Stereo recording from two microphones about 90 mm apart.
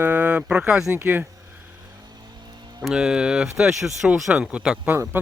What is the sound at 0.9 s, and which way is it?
Speech, 20° right (ahead or behind).